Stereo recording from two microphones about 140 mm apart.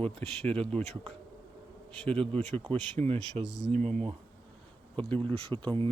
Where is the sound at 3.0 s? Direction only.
45° right (ahead or behind).